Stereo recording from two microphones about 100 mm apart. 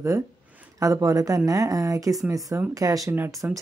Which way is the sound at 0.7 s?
35° right (ahead or behind).